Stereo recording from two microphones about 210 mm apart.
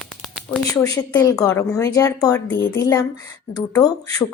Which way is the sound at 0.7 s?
15° left (ahead or behind).